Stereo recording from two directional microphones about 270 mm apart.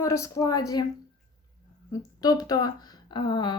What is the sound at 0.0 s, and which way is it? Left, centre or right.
Speech, centre.